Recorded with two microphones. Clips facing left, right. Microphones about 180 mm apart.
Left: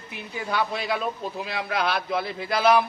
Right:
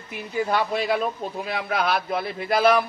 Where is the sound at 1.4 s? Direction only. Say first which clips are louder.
Right 2 dB; 55° right (ahead or behind).